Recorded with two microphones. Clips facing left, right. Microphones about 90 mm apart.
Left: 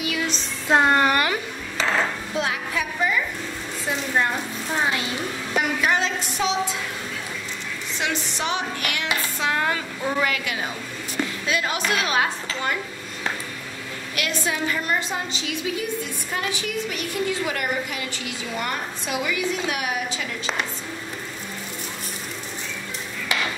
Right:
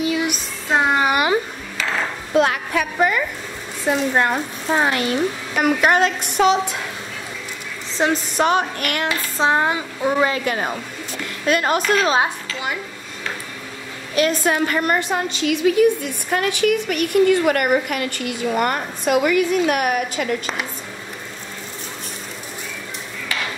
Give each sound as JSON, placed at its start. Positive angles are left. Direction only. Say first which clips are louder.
{"t": 0.0, "sound": "a sound", "louder": "right 6 dB", "side_deg": -25}
{"t": 0.7, "sound": "speech", "louder": "even", "side_deg": 0}
{"t": 2.3, "sound": "a woman's voice", "louder": "right 10 dB", "side_deg": -60}
{"t": 8.0, "sound": "a woman's voice", "louder": "right 9 dB", "side_deg": -45}
{"t": 9.4, "sound": "a woman's voice", "louder": "right 7 dB", "side_deg": -25}
{"t": 10.4, "sound": "a woman's voice", "louder": "right 6 dB", "side_deg": -45}
{"t": 11.9, "sound": "speech", "louder": "right 5 dB", "side_deg": -30}
{"t": 14.4, "sound": "a woman's voice", "louder": "right 6 dB", "side_deg": -55}